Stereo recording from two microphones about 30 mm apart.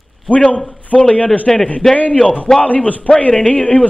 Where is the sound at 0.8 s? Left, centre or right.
Left.